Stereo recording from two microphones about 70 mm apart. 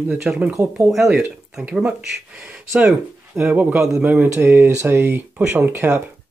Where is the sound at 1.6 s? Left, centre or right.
Centre.